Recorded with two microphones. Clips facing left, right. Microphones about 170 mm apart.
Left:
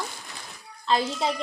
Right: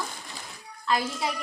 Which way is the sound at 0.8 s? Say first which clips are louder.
Left 3 dB; 25° left (ahead or behind).